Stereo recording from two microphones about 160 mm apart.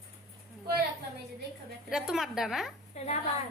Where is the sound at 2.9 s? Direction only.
40° left (ahead or behind).